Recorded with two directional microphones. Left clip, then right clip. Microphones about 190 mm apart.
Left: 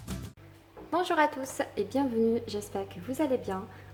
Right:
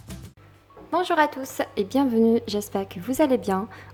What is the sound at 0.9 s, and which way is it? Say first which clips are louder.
A woman's voice: right 5 dB; 20° right (ahead or behind).